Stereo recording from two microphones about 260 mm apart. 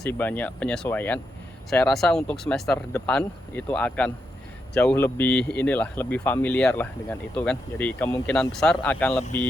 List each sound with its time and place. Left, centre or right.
0.0 s speech: centre